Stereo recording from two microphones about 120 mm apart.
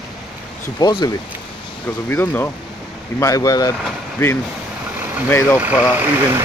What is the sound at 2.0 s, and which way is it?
Speech, 15° left (ahead or behind).